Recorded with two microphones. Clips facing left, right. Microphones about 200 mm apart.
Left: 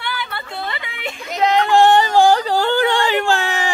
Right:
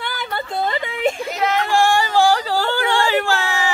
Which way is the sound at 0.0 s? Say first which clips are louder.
Right 2 dB; 40° right (ahead or behind).